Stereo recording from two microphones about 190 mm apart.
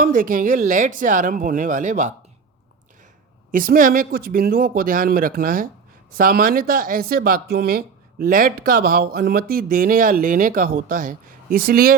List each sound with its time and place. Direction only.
0.0 s speech: 45° right (ahead or behind)
3.5 s speech: 50° right (ahead or behind)